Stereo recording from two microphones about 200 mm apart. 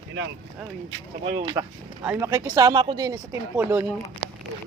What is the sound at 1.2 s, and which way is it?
Speech, 25° right (ahead or behind).